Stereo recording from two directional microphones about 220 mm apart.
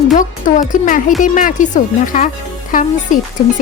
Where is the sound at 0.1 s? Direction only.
35° left (ahead or behind).